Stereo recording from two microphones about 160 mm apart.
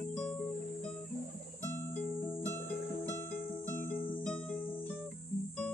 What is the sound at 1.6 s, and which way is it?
Music, 15° left (ahead or behind).